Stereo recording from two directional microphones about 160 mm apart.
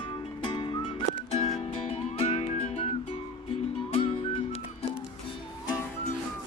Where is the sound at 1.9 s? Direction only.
35° left (ahead or behind).